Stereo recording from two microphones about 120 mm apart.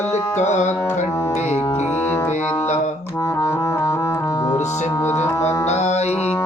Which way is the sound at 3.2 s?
25° left (ahead or behind).